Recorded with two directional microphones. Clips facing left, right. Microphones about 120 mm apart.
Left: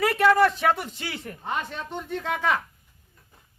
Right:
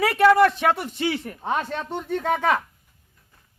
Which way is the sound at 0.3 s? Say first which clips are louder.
Right 3 dB; 15° right (ahead or behind).